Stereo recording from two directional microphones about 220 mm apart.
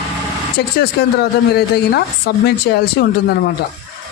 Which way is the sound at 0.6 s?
45° left (ahead or behind).